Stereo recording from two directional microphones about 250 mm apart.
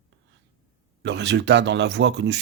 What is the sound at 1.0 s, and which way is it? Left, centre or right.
Speech, right.